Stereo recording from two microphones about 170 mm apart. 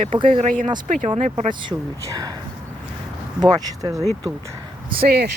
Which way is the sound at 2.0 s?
20° right (ahead or behind).